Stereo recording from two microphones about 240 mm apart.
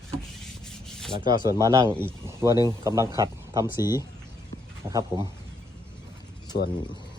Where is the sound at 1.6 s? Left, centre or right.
Centre.